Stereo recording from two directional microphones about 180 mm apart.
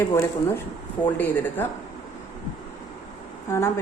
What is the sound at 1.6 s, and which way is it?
Speech, 10° left (ahead or behind).